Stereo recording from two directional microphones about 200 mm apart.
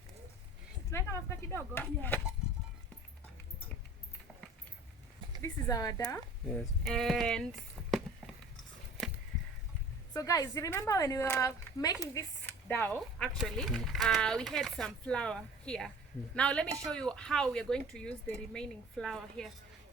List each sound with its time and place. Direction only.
0.9 s a woman's voice: 15° left (ahead or behind)
5.4 s a woman's voice: 15° left (ahead or behind)
6.5 s speech: centre (ahead or behind)
10.2 s a woman's voice: 15° left (ahead or behind); by 19.5 s centre (ahead or behind)